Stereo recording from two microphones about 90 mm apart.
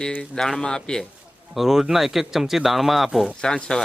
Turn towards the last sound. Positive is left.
turn(degrees=5)  # may be behind; listen again after turning